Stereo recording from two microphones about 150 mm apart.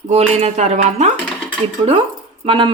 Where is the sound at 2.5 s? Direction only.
35° right (ahead or behind).